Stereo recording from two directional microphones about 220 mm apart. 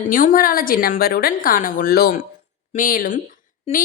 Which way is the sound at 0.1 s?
40° left (ahead or behind).